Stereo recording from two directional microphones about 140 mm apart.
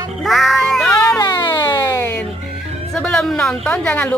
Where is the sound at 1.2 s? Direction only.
30° left (ahead or behind).